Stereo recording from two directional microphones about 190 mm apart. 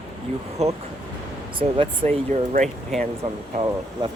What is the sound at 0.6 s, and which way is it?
Speech, 35° right (ahead or behind).